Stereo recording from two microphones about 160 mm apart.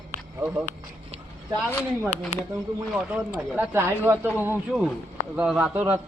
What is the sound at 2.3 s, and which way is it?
Speech, 45° left (ahead or behind).